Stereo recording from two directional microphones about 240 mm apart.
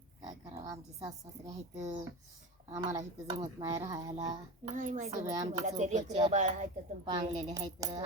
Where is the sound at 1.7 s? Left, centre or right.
Right.